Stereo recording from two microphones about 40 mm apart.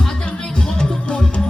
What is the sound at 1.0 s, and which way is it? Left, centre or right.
Music, left.